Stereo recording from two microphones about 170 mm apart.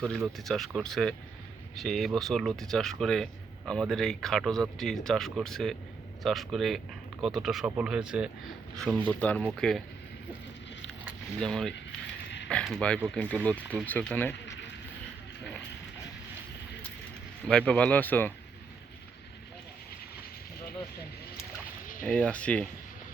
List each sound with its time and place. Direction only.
0.0 s speech: centre (ahead or behind)
11.3 s speech: 5° left (ahead or behind)
14.4 s a sound: 90° left
17.5 s speech: 5° left (ahead or behind)
22.0 s speech: 5° left (ahead or behind)